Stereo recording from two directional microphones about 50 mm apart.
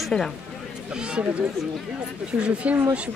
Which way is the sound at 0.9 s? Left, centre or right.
Centre.